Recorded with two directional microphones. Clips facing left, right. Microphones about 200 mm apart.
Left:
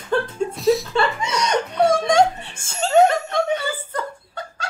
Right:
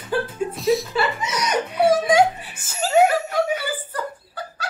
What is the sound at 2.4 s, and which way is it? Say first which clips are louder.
Chuckle: left 2 dB; 30° left (ahead or behind).